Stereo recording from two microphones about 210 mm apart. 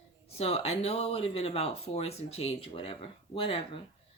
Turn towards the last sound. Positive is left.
turn(degrees=25)  # may be behind; listen again after turning